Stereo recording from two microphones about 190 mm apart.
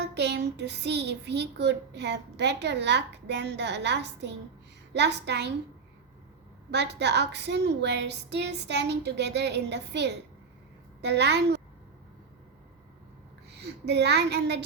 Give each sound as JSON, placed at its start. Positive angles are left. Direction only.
{"t": 0.0, "sound": "a child's voice", "side_deg": -65}
{"t": 6.7, "sound": "a child's voice", "side_deg": -65}
{"t": 13.6, "sound": "speech", "side_deg": -60}